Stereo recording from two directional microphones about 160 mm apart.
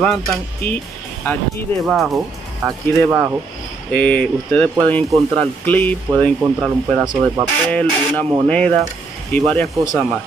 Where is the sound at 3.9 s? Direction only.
10° left (ahead or behind).